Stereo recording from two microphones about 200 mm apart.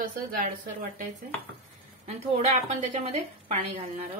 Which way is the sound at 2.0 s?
30° right (ahead or behind).